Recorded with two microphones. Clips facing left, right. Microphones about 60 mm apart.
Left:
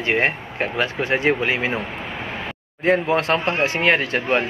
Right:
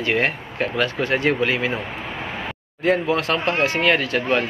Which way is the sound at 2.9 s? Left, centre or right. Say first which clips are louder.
Left 3 dB; left.